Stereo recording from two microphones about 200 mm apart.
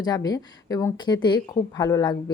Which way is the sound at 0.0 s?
20° left (ahead or behind).